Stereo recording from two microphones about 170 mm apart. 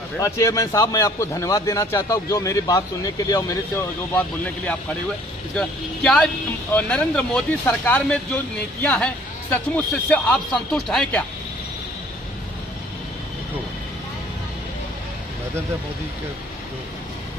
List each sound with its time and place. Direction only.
0.2 s a man's voice: 20° left (ahead or behind)
5.6 s speech: 5° left (ahead or behind)